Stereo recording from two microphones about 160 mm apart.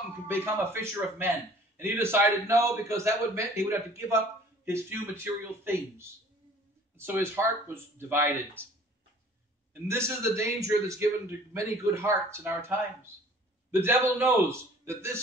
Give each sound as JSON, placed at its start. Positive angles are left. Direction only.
{"t": 0.3, "sound": "a man's voice", "side_deg": -15}
{"t": 9.8, "sound": "a man's voice", "side_deg": -15}